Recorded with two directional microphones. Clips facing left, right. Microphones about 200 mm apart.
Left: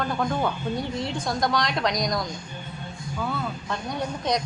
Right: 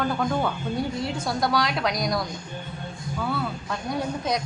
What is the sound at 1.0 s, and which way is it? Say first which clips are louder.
A woman's voice: even; 5° right (ahead or behind).